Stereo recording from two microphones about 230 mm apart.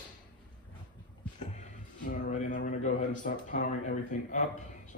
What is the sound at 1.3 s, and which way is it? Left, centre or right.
Speech, left.